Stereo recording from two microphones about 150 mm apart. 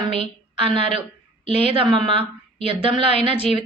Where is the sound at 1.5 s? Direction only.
35° right (ahead or behind).